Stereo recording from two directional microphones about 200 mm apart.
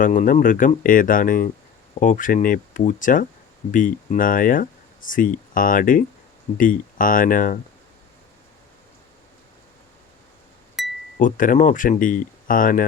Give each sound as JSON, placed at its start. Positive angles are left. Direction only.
{"t": 0.0, "sound": "speech", "side_deg": 40}
{"t": 10.8, "sound": "chink", "side_deg": 0}
{"t": 11.2, "sound": "speech", "side_deg": 40}